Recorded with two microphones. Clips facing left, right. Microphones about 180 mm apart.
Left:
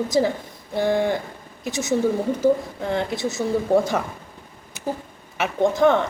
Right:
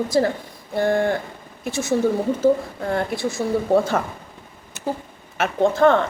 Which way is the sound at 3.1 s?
20° left (ahead or behind).